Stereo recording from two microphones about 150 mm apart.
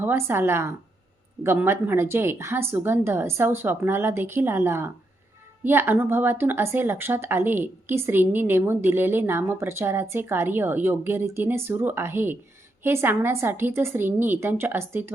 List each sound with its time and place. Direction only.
0.0 s speech: 15° right (ahead or behind)